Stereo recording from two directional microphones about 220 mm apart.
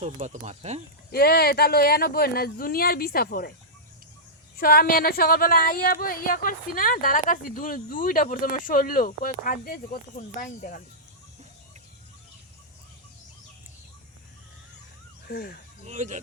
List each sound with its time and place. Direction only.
0.0 s speech: 30° right (ahead or behind)
1.1 s speech: 45° left (ahead or behind)
4.5 s speech: 40° left (ahead or behind)
15.3 s speech: 45° left (ahead or behind)
15.9 s speech: 35° right (ahead or behind)